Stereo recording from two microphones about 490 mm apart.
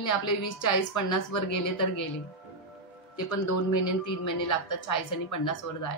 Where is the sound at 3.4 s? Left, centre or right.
Left.